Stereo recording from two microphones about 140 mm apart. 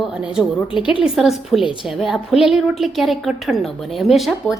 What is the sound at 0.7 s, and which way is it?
Speech, 35° left (ahead or behind).